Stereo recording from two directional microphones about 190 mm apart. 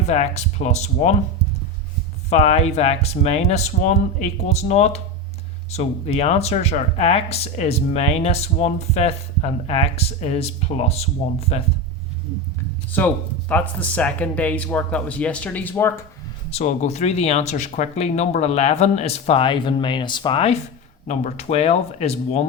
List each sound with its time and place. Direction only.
0.0 s speech: 35° left (ahead or behind)
2.3 s speech: 35° left (ahead or behind)
12.9 s speech: 10° left (ahead or behind)
16.5 s speech: 35° left (ahead or behind)